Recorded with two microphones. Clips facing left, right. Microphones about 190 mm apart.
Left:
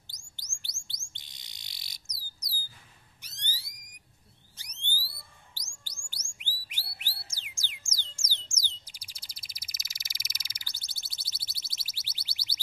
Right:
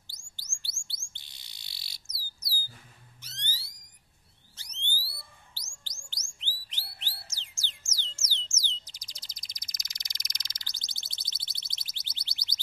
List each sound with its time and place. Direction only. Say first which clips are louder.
0.6 s bird: even; 20° left (ahead or behind)
3.2 s a sound: right 1 dB; 15° left (ahead or behind)
5.0 s bird: right 1 dB; 15° left (ahead or behind)